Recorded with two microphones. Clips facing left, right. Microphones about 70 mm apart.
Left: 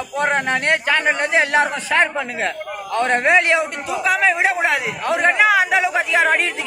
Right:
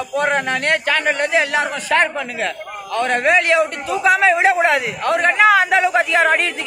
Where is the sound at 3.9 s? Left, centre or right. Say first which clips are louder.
Right 3 dB; centre.